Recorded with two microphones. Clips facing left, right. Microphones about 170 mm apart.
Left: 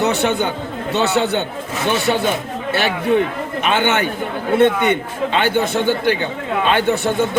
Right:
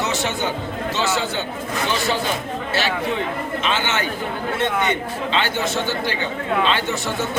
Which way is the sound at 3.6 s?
55° left (ahead or behind).